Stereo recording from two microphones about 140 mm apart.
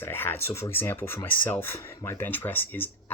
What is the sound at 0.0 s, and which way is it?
Speech, 15° left (ahead or behind).